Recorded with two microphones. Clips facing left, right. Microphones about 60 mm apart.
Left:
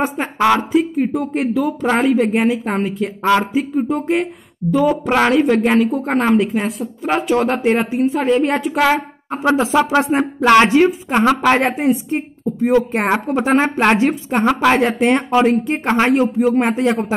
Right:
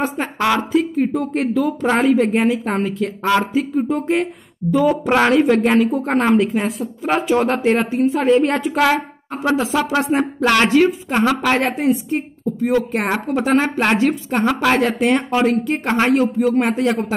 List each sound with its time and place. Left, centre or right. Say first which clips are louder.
0.0 s speech: left 3 dB; centre
9.3 s speech: left 3 dB; centre